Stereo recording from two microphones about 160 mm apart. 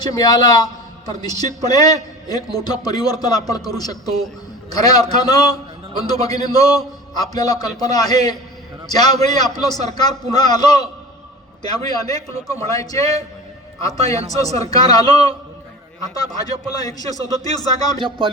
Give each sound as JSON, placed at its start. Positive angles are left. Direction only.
{"t": 0.0, "sound": "a man's voice", "side_deg": 25}
{"t": 14.4, "sound": "a man's voice", "side_deg": 25}